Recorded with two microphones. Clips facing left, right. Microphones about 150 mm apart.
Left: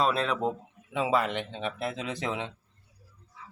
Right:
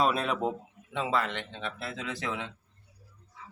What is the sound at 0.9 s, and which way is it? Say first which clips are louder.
Speech: left 3 dB; 10° left (ahead or behind).